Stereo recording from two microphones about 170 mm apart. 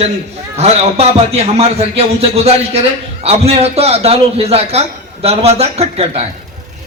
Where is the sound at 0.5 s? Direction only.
40° right (ahead or behind).